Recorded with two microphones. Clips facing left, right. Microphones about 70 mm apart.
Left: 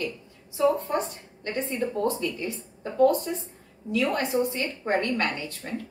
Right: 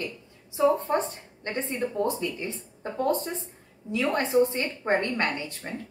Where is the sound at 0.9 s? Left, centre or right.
Right.